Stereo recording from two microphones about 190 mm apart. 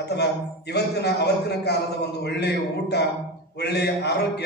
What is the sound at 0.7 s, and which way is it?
A man's voice, 60° left (ahead or behind).